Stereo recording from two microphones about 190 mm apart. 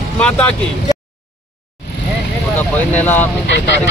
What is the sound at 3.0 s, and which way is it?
Speech, 10° left (ahead or behind).